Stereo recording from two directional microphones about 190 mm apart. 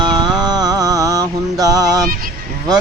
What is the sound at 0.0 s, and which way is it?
Mantra, 20° right (ahead or behind).